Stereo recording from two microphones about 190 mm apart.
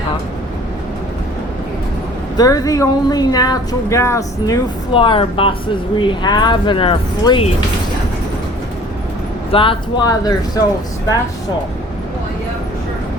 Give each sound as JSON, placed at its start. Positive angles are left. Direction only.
{"t": 2.4, "sound": "a woman's voice", "side_deg": 20}
{"t": 9.5, "sound": "a woman's voice", "side_deg": 25}